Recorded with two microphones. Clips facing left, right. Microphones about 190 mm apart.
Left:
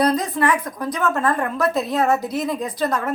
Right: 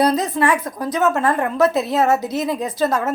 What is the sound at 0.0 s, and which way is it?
A woman's voice, 25° right (ahead or behind).